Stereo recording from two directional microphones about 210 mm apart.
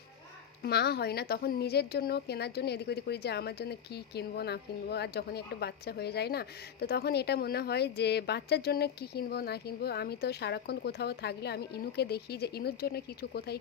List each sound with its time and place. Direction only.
0.6 s a woman's voice: 50° left (ahead or behind)